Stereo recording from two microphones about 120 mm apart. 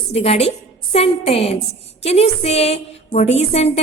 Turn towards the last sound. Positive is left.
turn(degrees=60)  # may be behind; listen again after turning